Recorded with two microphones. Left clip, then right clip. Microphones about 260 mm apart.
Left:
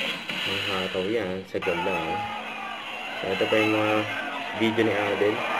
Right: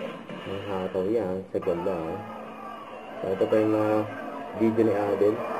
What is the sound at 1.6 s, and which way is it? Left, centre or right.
Speech, centre.